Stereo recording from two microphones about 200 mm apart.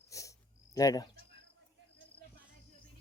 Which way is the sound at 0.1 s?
15° left (ahead or behind).